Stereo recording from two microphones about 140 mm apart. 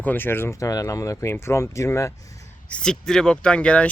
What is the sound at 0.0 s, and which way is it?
Speech, 15° left (ahead or behind).